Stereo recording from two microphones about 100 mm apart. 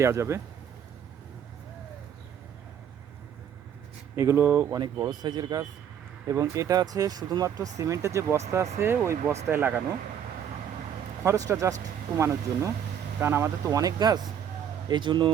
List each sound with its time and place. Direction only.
0.0 s speech: 30° right (ahead or behind)
4.1 s speech: 25° right (ahead or behind)
4.6 s speech: 40° right (ahead or behind)
6.2 s speech: 30° right (ahead or behind)
11.3 s speech: 35° right (ahead or behind)
14.8 s speech: 50° right (ahead or behind)